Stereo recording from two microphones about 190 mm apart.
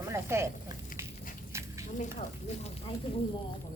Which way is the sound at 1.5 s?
15° right (ahead or behind).